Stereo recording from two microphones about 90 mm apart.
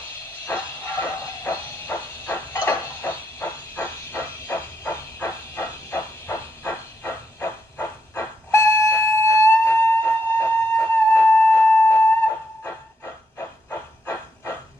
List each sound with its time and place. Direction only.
0.5 s train: 25° left (ahead or behind)
1.9 s a sound: 25° left (ahead or behind)
12.6 s hiss: 25° left (ahead or behind)